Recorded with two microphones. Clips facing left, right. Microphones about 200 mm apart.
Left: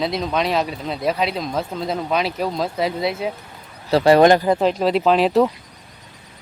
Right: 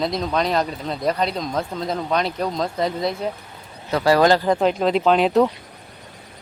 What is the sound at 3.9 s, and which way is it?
Speech, 25° left (ahead or behind).